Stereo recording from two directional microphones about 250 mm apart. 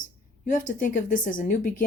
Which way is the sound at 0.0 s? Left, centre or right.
Left.